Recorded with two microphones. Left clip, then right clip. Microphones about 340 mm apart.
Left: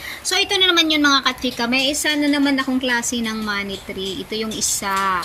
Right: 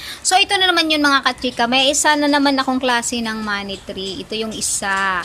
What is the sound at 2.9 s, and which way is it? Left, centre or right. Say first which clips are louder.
Speech: right 2 dB; centre.